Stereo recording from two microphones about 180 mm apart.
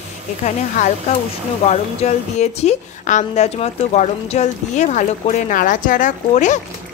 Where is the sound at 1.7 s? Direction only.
35° left (ahead or behind).